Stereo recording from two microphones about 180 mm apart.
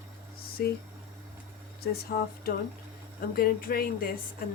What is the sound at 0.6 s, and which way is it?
Speech, 60° left (ahead or behind).